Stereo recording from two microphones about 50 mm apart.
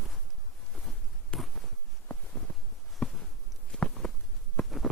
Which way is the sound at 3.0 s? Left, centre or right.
Centre.